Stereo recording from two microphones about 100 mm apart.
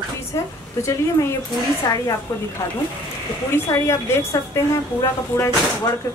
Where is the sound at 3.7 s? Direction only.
25° left (ahead or behind).